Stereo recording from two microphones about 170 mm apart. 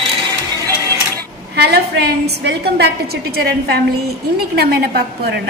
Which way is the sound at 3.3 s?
70° right (ahead or behind).